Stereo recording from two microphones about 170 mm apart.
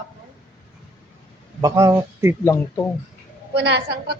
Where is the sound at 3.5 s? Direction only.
80° right.